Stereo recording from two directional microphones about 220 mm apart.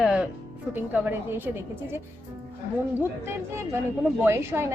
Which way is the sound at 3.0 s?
10° right (ahead or behind).